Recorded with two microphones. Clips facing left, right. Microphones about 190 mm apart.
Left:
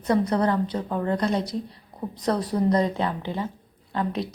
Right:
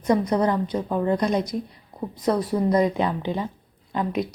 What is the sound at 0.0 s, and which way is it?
A woman's voice, 10° right (ahead or behind).